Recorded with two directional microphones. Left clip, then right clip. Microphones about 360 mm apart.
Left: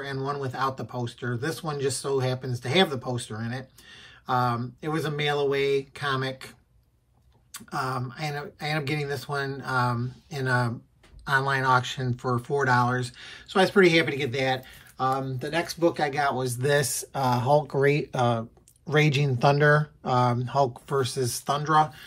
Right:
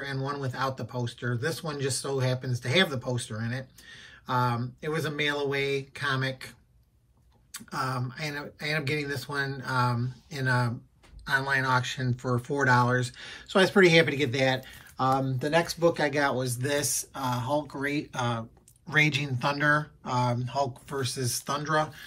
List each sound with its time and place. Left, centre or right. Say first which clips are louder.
0.0 s speech: left 3 dB; centre
7.5 s speech: left 2 dB; centre